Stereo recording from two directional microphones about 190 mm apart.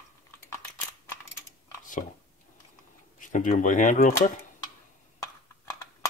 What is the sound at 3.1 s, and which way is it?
Speech, 45° left (ahead or behind).